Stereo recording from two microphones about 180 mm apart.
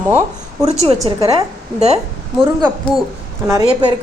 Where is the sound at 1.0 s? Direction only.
35° right (ahead or behind).